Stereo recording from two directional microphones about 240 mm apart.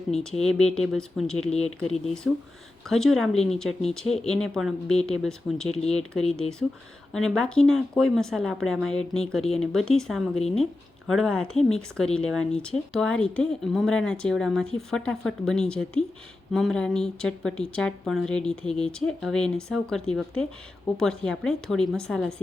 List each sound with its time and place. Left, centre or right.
0.2 s a woman's voice: centre
1.5 s speech: left
1.8 s a woman's voice: centre